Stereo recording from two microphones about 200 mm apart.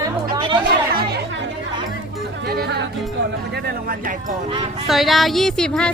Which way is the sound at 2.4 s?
55° right (ahead or behind).